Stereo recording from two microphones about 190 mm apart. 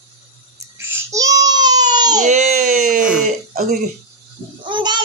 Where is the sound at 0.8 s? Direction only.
10° right (ahead or behind).